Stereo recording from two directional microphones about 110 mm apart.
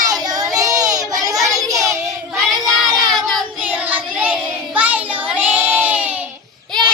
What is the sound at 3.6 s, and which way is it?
Child singing, 15° right (ahead or behind).